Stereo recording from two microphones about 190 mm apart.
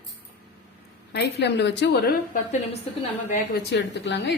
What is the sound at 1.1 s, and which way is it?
A woman's voice, 60° left (ahead or behind).